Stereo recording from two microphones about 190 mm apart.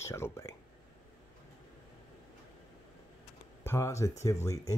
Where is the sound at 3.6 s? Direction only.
15° left (ahead or behind).